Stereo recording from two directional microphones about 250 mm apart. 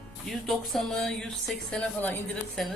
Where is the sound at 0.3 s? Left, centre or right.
Centre.